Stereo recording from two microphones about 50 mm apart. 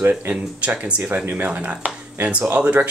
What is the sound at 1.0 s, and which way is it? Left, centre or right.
Speech, right.